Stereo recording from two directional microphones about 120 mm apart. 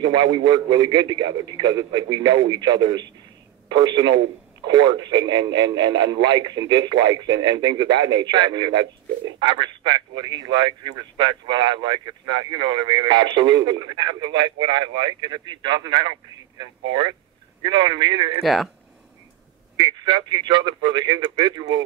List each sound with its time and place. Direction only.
0.0 s a man's voice: 40° right (ahead or behind)
18.4 s speech: centre (ahead or behind)
19.8 s a man's voice: 35° right (ahead or behind)